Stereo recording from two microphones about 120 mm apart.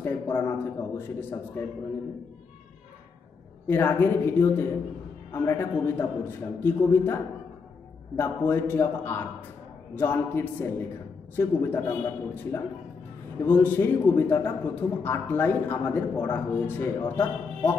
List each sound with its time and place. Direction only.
0.0 s a man's voice: 15° left (ahead or behind)
3.6 s a man's voice: 15° left (ahead or behind)
8.2 s a man's voice: 15° left (ahead or behind)
13.4 s a man's voice: 15° left (ahead or behind)